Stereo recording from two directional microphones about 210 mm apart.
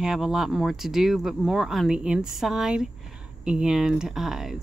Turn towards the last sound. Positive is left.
turn(degrees=0)  # may be behind; listen again after turning